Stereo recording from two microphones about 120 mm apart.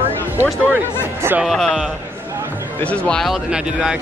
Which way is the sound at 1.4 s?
5° left (ahead or behind).